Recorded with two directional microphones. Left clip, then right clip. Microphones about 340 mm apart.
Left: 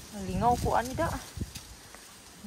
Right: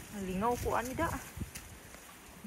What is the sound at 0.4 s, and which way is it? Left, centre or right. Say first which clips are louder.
Speech: left 7 dB; left.